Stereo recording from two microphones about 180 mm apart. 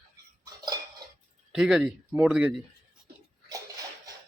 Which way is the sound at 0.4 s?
20° right (ahead or behind).